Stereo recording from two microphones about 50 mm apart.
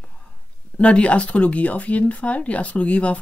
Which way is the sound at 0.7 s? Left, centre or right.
Left.